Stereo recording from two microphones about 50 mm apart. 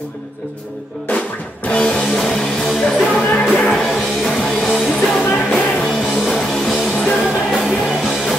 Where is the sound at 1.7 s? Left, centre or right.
Left.